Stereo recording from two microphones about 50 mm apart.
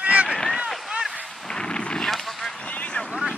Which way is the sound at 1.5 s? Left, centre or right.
Centre.